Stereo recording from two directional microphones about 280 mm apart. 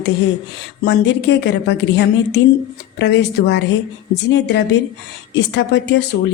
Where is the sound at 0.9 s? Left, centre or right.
Left.